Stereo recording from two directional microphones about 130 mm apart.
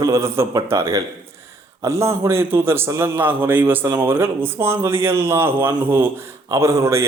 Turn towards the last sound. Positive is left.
turn(degrees=-20)  # may be behind; listen again after turning